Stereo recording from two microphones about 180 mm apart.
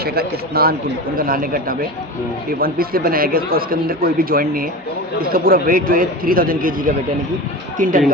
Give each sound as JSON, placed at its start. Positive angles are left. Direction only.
{"t": 0.0, "sound": "a man's voice", "side_deg": -60}